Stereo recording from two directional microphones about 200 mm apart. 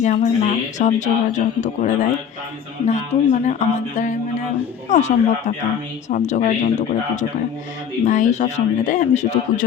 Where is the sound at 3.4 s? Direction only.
35° left (ahead or behind).